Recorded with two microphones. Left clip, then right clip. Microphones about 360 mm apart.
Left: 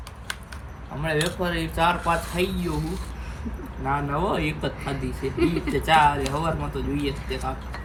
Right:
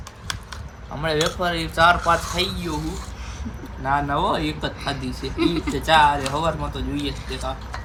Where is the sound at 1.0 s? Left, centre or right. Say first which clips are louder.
Right 4 dB; centre.